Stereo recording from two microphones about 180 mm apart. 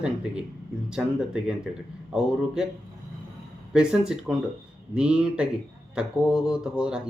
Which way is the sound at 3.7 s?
5° right (ahead or behind).